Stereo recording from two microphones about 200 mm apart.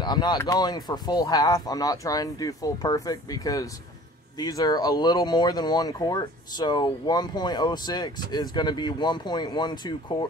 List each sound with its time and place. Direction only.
0.0 s speech: 20° left (ahead or behind)